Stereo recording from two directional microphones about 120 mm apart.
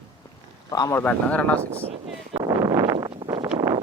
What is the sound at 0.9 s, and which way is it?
Speech, 10° left (ahead or behind).